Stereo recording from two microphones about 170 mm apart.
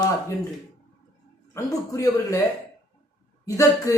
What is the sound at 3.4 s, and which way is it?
Speech, 20° left (ahead or behind).